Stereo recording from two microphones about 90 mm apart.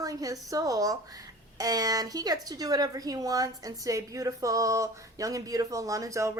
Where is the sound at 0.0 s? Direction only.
40° right (ahead or behind).